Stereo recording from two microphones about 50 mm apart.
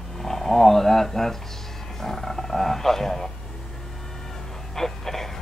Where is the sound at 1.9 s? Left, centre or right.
Centre.